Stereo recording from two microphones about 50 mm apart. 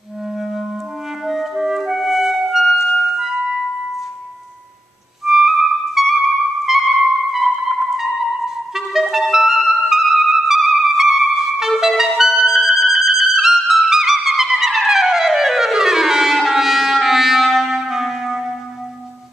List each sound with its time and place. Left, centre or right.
0.3 s clarinet: centre
1.2 s music: centre
5.2 s music: centre